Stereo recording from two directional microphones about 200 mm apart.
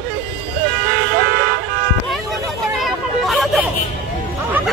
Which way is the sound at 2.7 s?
Centre (ahead or behind).